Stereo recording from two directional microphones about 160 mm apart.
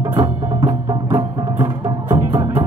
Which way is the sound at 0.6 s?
30° right (ahead or behind).